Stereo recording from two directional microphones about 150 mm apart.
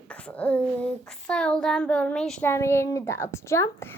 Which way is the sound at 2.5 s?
15° left (ahead or behind).